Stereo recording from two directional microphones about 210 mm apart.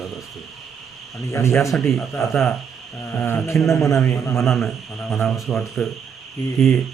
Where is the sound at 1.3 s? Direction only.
15° left (ahead or behind).